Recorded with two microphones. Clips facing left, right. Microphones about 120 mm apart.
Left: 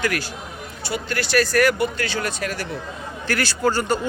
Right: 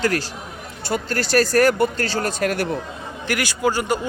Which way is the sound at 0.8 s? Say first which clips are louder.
Right 3 dB; 45° right (ahead or behind).